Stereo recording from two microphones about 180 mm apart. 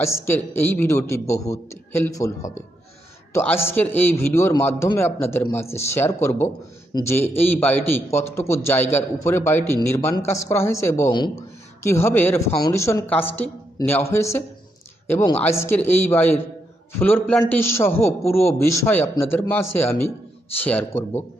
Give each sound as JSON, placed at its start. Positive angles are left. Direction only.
{"t": 0.0, "sound": "a man's voice", "side_deg": 15}
{"t": 17.5, "sound": "a man's voice", "side_deg": 15}